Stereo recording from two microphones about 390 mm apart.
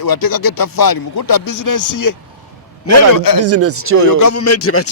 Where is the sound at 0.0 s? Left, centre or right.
Left.